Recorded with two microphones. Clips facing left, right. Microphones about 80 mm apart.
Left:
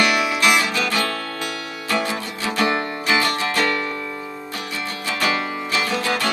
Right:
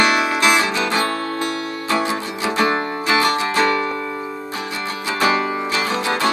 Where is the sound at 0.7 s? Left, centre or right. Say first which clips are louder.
Right 3 dB; right.